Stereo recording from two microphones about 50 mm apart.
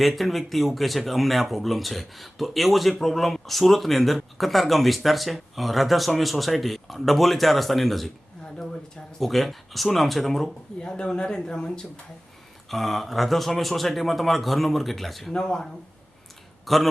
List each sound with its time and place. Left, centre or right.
0.0 s speech: centre
9.1 s speech: centre
10.8 s speech: centre
12.7 s speech: centre
15.3 s speech: centre
16.6 s speech: centre